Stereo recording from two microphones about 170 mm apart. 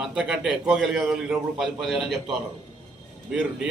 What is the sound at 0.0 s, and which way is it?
A man's voice, 5° right (ahead or behind).